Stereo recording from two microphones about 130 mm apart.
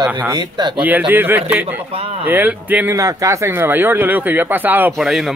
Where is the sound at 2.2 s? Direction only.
15° right (ahead or behind).